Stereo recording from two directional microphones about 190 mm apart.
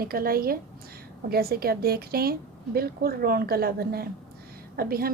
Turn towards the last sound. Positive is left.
turn(degrees=-50)  # may be behind; listen again after turning